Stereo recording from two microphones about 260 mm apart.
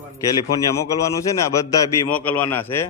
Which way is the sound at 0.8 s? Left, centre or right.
Centre.